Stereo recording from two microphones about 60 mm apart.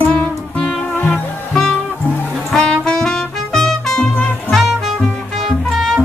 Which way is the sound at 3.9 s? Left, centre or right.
Left.